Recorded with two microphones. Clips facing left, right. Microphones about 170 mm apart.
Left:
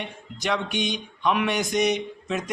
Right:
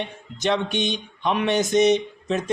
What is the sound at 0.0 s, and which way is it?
A man's voice, 25° right (ahead or behind).